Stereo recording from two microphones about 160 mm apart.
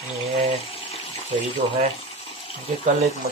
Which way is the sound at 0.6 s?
35° left (ahead or behind).